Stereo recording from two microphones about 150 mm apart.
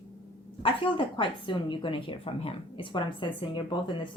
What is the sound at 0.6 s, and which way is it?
Speech, 35° left (ahead or behind).